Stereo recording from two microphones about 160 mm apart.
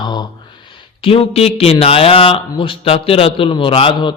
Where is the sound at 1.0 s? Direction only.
35° left (ahead or behind).